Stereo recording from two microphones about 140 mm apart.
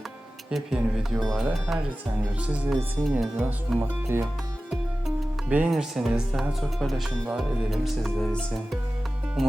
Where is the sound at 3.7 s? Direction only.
15° right (ahead or behind).